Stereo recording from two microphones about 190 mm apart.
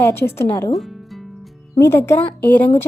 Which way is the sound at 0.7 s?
Centre (ahead or behind).